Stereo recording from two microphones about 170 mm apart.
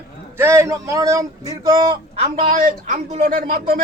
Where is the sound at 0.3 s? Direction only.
15° right (ahead or behind).